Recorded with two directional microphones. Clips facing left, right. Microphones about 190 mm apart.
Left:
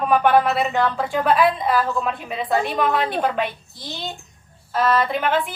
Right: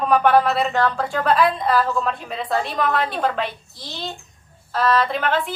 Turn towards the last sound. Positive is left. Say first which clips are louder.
# even
turn(degrees=5)  # may be behind; listen again after turning